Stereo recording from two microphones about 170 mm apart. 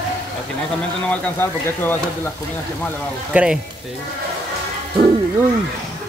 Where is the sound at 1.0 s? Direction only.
10° left (ahead or behind).